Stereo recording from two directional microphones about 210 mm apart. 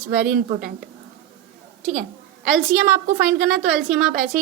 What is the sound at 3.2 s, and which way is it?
Speech, 5° right (ahead or behind).